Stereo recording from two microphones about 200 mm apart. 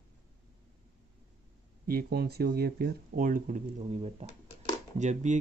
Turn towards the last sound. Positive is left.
turn(degrees=-35)  # may be behind; listen again after turning